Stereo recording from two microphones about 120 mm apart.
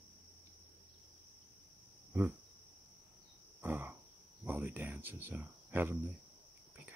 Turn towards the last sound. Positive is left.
turn(degrees=-15)  # may be behind; listen again after turning